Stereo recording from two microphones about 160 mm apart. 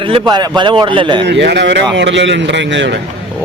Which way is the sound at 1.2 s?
90° right.